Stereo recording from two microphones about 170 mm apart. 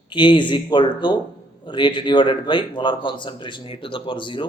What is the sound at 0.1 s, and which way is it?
A man's voice, 30° left (ahead or behind).